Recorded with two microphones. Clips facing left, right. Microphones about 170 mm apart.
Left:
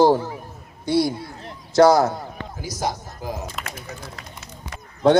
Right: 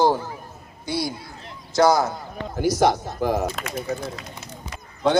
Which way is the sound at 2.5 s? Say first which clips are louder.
Right 9 dB; 70° right (ahead or behind).